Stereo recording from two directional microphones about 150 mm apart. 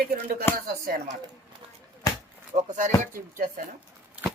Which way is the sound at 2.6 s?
55° right (ahead or behind).